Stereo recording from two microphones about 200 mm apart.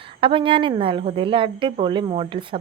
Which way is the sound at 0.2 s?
25° right (ahead or behind).